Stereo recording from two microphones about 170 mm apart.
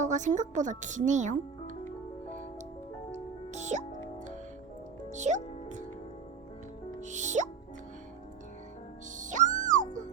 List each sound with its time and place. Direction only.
0.0 s speech: 45° right (ahead or behind)
3.5 s music: 45° right (ahead or behind)
5.1 s music: 45° right (ahead or behind)
7.0 s music: 45° right (ahead or behind)
9.1 s music: 50° right (ahead or behind)